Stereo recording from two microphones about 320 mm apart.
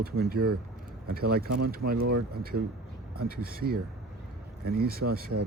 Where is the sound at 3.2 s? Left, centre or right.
Right.